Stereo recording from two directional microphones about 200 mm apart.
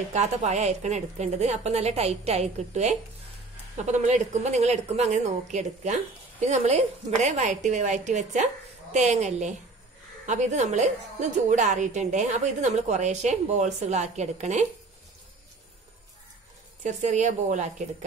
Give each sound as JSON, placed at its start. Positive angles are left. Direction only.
{"t": 0.1, "sound": "a woman's voice", "side_deg": -35}
{"t": 16.8, "sound": "a woman's voice", "side_deg": -35}